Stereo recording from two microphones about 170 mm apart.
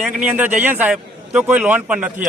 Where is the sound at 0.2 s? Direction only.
10° right (ahead or behind).